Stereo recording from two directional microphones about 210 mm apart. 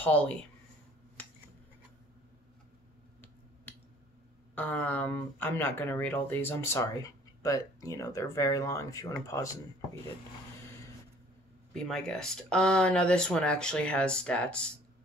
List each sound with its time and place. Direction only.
0.0 s speech: 5° left (ahead or behind)
3.7 s a sound: 5° left (ahead or behind)
4.6 s speech: 10° left (ahead or behind)
11.7 s speech: 5° left (ahead or behind)